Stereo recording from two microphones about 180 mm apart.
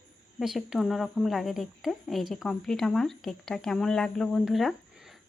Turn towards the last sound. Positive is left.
turn(degrees=0)  # may be behind; listen again after turning